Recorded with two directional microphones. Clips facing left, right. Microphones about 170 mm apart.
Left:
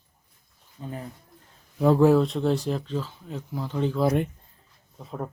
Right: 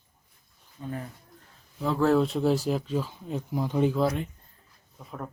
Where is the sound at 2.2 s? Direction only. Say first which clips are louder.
Even; 5° right (ahead or behind).